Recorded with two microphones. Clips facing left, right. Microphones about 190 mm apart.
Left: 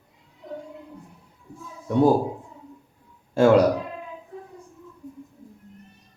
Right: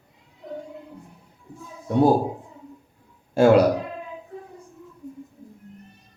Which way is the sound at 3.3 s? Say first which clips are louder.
Right 1 dB; 10° right (ahead or behind).